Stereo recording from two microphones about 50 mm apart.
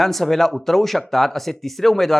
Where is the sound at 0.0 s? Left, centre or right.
Centre.